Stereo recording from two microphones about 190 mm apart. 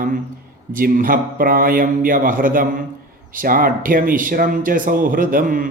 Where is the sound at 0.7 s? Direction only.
45° right (ahead or behind).